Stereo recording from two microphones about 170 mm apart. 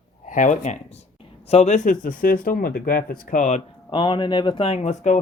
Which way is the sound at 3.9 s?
30° left (ahead or behind).